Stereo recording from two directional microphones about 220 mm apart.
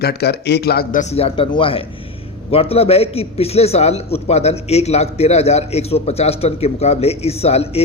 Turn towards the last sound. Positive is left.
turn(degrees=30)  # may be behind; listen again after turning